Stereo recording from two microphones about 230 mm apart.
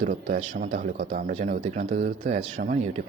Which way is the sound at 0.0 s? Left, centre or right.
Right.